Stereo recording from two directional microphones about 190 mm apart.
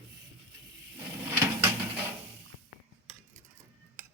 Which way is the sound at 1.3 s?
10° right (ahead or behind).